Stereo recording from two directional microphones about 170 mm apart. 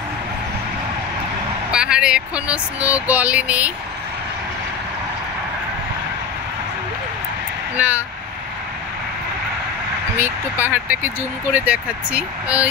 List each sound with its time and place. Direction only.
1.7 s speech: 5° right (ahead or behind)
7.7 s speech: 10° right (ahead or behind)
10.1 s speech: 10° right (ahead or behind)